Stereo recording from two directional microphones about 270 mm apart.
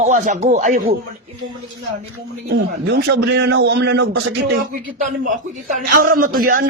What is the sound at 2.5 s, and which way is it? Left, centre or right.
A man's voice, right.